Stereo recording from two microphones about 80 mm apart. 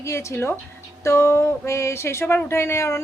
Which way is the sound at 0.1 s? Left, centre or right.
Left.